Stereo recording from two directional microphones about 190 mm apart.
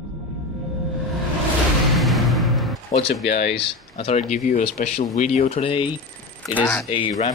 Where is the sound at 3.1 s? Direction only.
65° left (ahead or behind).